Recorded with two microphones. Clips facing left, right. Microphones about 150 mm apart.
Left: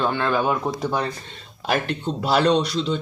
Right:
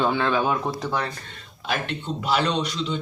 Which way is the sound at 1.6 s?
40° left (ahead or behind).